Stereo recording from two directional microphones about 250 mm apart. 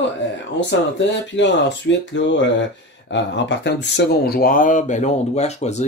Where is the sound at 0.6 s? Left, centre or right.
Left.